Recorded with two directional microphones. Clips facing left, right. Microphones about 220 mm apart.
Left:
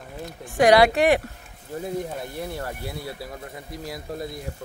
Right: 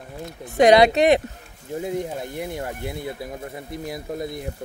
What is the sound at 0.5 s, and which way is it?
Speech, 20° right (ahead or behind).